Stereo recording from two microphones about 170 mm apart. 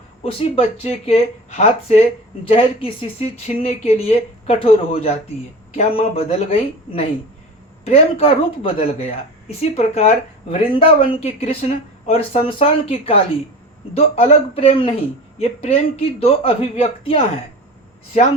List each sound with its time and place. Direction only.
0.2 s speech: 35° left (ahead or behind)